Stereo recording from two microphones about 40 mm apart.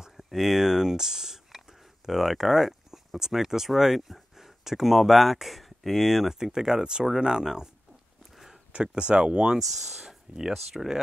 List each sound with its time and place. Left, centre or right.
0.2 s speech: centre
8.7 s speech: right
9.6 s speech: centre